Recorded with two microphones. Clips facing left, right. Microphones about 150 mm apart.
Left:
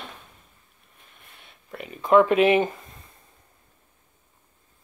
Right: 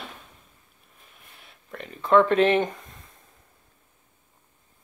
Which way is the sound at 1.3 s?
Centre (ahead or behind).